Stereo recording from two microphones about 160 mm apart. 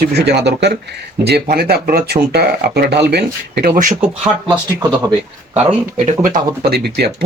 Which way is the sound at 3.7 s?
55° right (ahead or behind).